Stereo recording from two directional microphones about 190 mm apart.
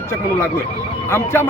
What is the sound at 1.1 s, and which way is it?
Speech, 15° left (ahead or behind).